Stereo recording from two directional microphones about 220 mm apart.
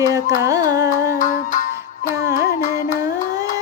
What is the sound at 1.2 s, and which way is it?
Music, 35° left (ahead or behind).